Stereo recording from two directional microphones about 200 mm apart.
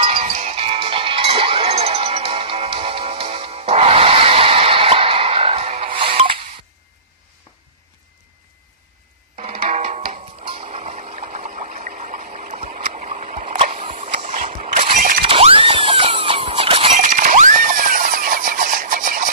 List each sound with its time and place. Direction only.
0.0 s music: 30° right (ahead or behind)
10.4 s water: 30° right (ahead or behind)
15.2 s squeal: 25° right (ahead or behind); by 19.3 s 45° right (ahead or behind)